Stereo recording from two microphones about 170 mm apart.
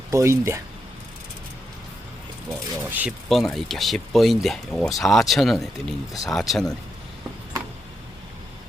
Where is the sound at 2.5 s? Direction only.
5° right (ahead or behind).